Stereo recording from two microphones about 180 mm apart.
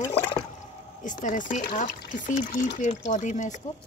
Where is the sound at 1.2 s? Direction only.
45° left (ahead or behind).